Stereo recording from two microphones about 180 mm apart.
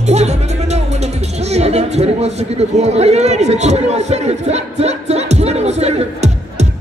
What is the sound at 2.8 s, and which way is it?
Chatter, 35° right (ahead or behind).